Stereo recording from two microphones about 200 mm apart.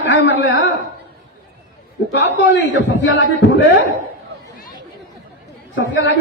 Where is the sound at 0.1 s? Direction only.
65° left (ahead or behind).